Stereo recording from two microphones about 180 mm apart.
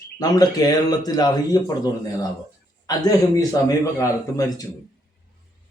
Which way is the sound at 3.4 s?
20° left (ahead or behind).